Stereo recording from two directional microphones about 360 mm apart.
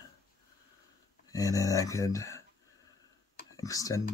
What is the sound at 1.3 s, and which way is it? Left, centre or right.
Speech, centre.